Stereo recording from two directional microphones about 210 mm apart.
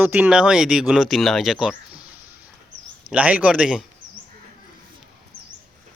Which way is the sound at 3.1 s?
5° right (ahead or behind).